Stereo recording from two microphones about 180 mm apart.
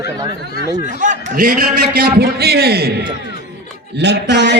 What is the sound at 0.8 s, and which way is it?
Speech, 45° right (ahead or behind).